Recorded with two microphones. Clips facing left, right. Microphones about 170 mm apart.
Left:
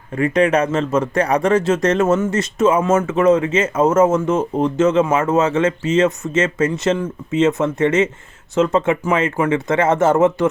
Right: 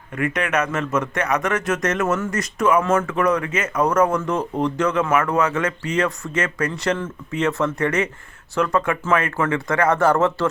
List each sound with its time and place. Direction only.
0.2 s speech: 30° left (ahead or behind)